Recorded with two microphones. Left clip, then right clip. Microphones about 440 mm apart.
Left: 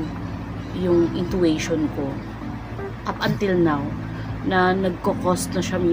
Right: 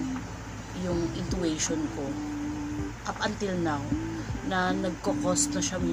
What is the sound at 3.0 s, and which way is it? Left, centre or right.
Speech, right.